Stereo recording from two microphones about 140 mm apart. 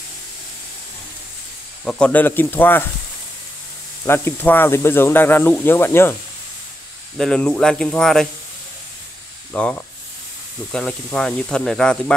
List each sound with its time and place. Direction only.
1.9 s speech: 10° left (ahead or behind)
4.0 s speech: 15° left (ahead or behind)
7.2 s speech: 5° left (ahead or behind)
9.5 s speech: 10° left (ahead or behind)